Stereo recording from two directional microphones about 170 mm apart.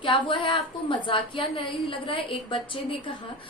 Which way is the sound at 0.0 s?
30° left (ahead or behind).